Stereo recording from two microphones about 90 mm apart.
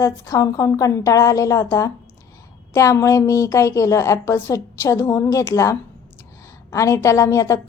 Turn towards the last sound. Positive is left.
turn(degrees=35)  # may be behind; listen again after turning